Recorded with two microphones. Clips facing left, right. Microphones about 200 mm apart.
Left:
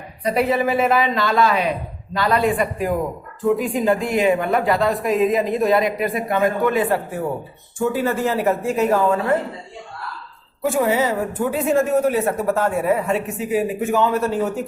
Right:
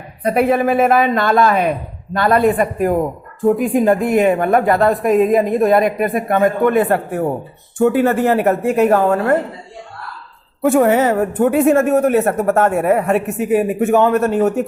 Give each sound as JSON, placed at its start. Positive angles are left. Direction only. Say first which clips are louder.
{"t": 0.2, "sound": "a woman's voice", "louder": "right 4 dB", "side_deg": -55}
{"t": 10.6, "sound": "a woman's voice", "louder": "right 6 dB", "side_deg": -60}